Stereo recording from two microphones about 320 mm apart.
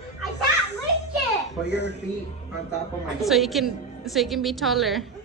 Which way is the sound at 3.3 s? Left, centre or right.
Centre.